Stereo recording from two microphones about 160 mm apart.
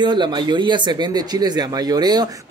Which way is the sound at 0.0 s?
30° right (ahead or behind).